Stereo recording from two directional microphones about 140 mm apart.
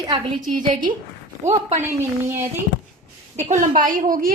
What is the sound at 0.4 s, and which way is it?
Speech, 70° right (ahead or behind).